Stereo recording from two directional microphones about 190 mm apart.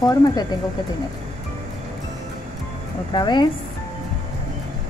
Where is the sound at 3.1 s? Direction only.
25° left (ahead or behind).